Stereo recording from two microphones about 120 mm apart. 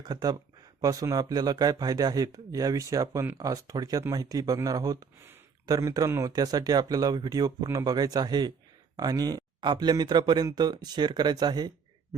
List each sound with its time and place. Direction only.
0.0 s speech: 35° right (ahead or behind)